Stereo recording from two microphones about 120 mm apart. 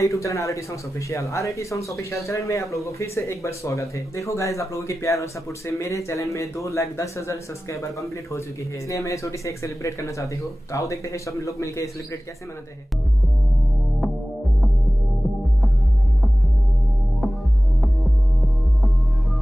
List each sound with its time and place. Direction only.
0.0 s speech: 25° left (ahead or behind)